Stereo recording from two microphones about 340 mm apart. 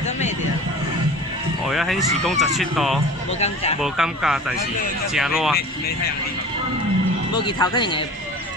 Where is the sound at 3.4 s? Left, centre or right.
Centre.